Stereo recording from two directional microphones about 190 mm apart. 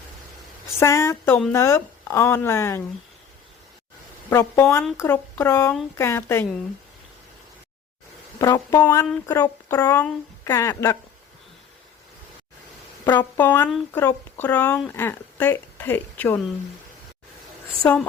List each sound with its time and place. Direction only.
0.8 s a woman's voice: 15° left (ahead or behind)
4.3 s a woman's voice: 10° left (ahead or behind)
8.4 s a woman's voice: 20° left (ahead or behind)
13.1 s a woman's voice: 10° left (ahead or behind)
13.7 s a woman's voice: centre (ahead or behind)